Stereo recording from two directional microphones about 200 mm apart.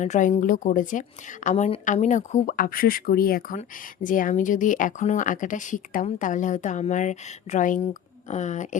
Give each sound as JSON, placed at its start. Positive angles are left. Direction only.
{"t": 0.0, "sound": "speech", "side_deg": 40}